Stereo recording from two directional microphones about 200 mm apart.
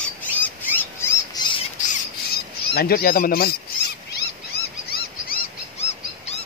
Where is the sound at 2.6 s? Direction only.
50° left (ahead or behind).